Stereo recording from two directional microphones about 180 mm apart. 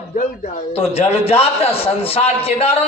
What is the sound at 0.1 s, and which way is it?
A man's voice, 45° left (ahead or behind).